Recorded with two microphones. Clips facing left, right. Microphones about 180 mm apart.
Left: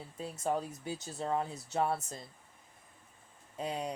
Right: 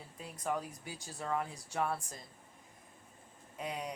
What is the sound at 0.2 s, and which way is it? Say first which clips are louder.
Speech: left 4 dB; 30° left (ahead or behind).